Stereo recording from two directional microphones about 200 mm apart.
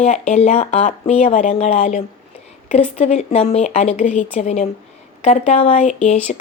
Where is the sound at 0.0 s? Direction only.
40° left (ahead or behind).